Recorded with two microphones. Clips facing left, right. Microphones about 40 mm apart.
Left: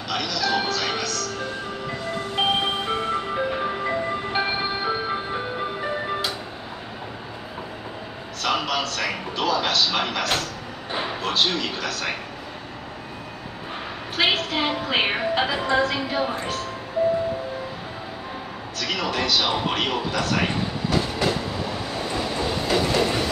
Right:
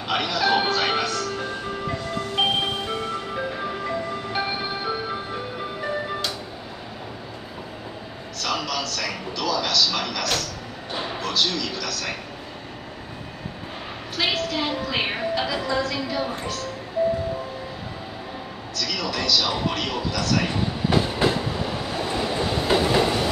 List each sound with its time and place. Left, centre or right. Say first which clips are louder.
0.1 s music: right 3 dB; right
1.9 s marimba: even; centre
2.8 s music: left 3 dB; centre
8.4 s a sound: left 3 dB; left
14.1 s a woman's voice: left 2 dB; left
18.8 s speech: left 2 dB; left
20.9 s train: right 2 dB; centre